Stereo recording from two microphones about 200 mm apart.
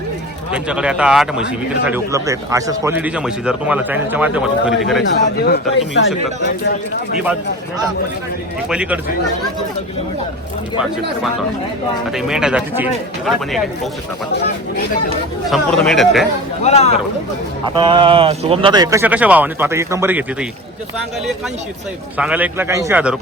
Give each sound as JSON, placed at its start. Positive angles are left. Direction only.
{"t": 0.5, "sound": "speech", "side_deg": -5}
{"t": 2.1, "sound": "speech", "side_deg": -15}
{"t": 5.5, "sound": "speech", "side_deg": 60}
{"t": 8.7, "sound": "speech", "side_deg": -5}
{"t": 12.1, "sound": "speech", "side_deg": -5}
{"t": 15.4, "sound": "speech", "side_deg": 0}
{"t": 16.6, "sound": "speech", "side_deg": 30}
{"t": 17.7, "sound": "speech", "side_deg": -25}
{"t": 22.2, "sound": "speech", "side_deg": -5}